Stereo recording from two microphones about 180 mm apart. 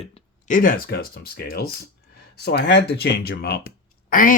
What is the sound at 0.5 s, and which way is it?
Speech, 50° left (ahead or behind).